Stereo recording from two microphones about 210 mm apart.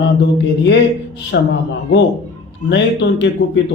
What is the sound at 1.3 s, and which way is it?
Speech, 50° left (ahead or behind).